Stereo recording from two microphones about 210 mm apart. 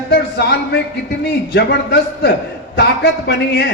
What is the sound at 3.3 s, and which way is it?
Speech, 50° left (ahead or behind).